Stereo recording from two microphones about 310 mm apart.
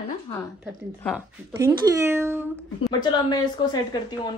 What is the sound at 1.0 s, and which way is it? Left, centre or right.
A woman's voice, centre.